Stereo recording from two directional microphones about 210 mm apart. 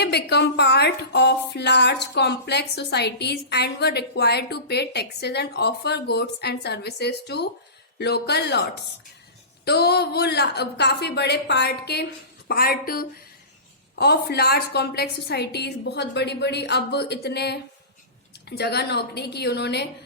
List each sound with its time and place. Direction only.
0.0 s a woman's voice: 50° left (ahead or behind)
9.6 s a woman's voice: 50° left (ahead or behind)